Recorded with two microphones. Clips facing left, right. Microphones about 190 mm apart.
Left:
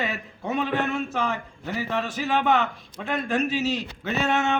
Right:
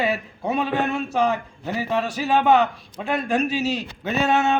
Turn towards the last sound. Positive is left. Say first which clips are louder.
# right 4 dB
turn(degrees=-15)  # may be behind; listen again after turning